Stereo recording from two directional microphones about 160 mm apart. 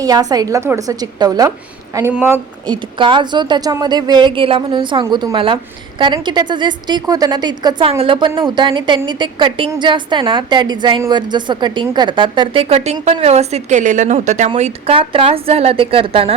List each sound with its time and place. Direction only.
0.0 s a woman's voice: 25° right (ahead or behind)
2.6 s a woman's voice: 30° right (ahead or behind); by 14.5 s 50° right (ahead or behind)
14.5 s speech: 35° right (ahead or behind)